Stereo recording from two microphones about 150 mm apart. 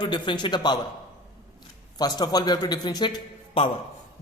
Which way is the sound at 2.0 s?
25° left (ahead or behind).